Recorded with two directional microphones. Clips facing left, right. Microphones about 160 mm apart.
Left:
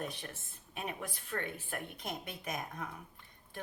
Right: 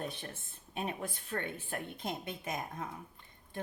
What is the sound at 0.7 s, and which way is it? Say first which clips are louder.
Speech: right 3 dB; 30° right (ahead or behind).